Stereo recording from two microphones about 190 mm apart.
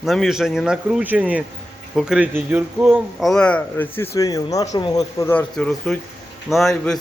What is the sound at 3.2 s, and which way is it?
Speech, 5° left (ahead or behind).